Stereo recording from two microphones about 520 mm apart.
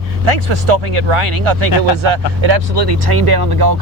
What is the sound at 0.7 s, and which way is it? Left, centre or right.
Speech, right.